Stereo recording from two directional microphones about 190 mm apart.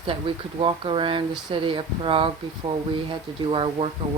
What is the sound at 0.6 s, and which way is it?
Speech, 25° right (ahead or behind).